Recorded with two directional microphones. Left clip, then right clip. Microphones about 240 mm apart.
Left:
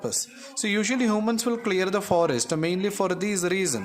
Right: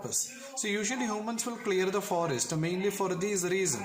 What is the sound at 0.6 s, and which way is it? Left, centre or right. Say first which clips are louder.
A man's voice: left 7 dB; left.